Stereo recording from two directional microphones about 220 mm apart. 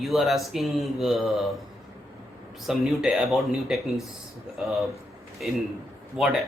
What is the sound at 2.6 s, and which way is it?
A man's voice, centre (ahead or behind).